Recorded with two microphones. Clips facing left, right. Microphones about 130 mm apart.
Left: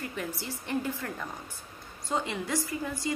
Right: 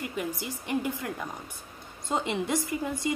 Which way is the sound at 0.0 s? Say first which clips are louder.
Right 3 dB; 15° right (ahead or behind).